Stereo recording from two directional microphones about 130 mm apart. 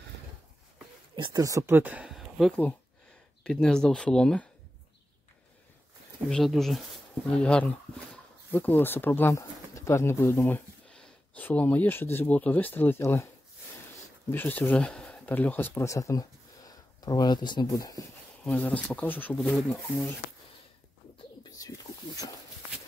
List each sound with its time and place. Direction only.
1.1 s speech: 40° right (ahead or behind)
1.4 s speech: 25° right (ahead or behind)
1.8 s speech: 10° right (ahead or behind); by 4.5 s 5° left (ahead or behind)
6.2 s speech: centre (ahead or behind); by 13.3 s 20° left (ahead or behind)
14.3 s speech: 15° left (ahead or behind)
18.4 s speech: 10° left (ahead or behind)
19.3 s speech: centre (ahead or behind)
21.5 s a sound: 25° left (ahead or behind)